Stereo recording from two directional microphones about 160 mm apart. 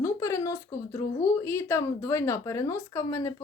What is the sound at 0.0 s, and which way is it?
Speech, 20° left (ahead or behind).